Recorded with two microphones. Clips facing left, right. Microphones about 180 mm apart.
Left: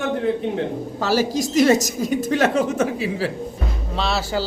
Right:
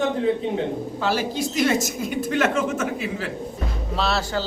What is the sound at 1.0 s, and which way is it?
Speech, 40° left (ahead or behind).